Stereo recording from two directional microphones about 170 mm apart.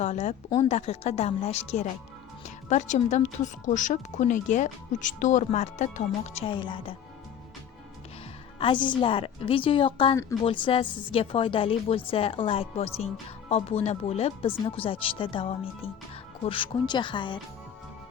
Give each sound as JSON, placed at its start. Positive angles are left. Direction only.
{"t": 0.0, "sound": "a woman's voice", "side_deg": 40}
{"t": 8.5, "sound": "a woman's voice", "side_deg": 30}